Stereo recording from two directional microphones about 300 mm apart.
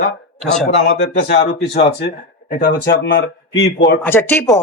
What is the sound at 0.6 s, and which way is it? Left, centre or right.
Speech, left.